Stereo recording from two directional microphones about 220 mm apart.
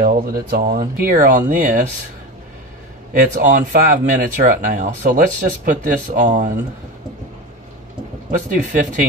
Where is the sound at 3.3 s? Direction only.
35° right (ahead or behind).